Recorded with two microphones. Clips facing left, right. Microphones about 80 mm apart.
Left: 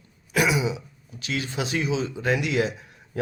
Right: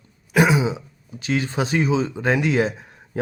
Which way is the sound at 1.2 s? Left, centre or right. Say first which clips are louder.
Right 6 dB; right.